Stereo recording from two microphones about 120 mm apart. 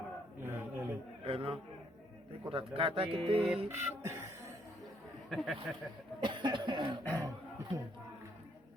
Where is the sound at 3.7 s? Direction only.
20° right (ahead or behind).